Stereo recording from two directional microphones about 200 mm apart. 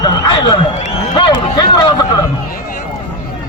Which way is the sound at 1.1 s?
20° left (ahead or behind).